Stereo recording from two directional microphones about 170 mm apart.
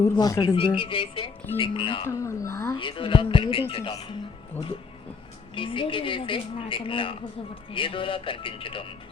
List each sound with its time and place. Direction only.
0.0 s a woman's voice: 20° left (ahead or behind)
2.0 s speech: 15° left (ahead or behind)
2.7 s speech: 30° left (ahead or behind)
5.5 s speech: 30° left (ahead or behind)